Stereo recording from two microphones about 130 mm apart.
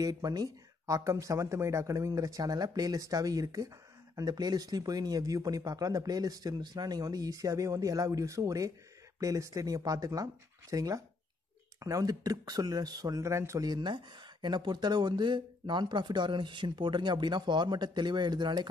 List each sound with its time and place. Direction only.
0.0 s speech: 30° right (ahead or behind)